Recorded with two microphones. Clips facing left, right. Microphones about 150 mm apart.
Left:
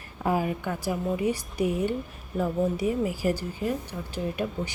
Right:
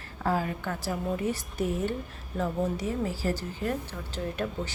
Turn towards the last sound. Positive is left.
turn(degrees=10)  # may be behind; listen again after turning